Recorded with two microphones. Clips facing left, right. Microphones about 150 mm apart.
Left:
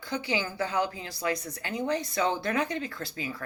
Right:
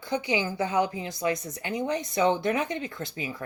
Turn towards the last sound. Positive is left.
turn(degrees=-20)  # may be behind; listen again after turning